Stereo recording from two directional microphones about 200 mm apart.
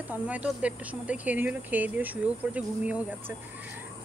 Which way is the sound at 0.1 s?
5° right (ahead or behind).